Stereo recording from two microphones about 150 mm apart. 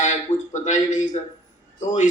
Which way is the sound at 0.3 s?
50° left (ahead or behind).